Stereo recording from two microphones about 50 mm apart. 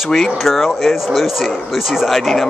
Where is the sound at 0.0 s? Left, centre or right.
Centre.